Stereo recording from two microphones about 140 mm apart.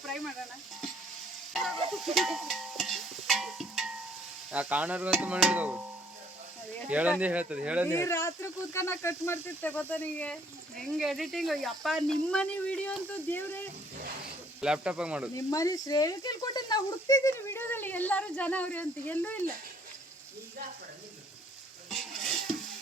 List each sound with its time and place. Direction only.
1.5 s a sound: centre (ahead or behind)
4.5 s speech: 10° right (ahead or behind)
6.9 s speech: 10° right (ahead or behind)
7.9 s speech: 20° left (ahead or behind)
10.8 s speech: centre (ahead or behind)
14.6 s speech: 5° right (ahead or behind)
15.4 s a child's voice: 25° left (ahead or behind)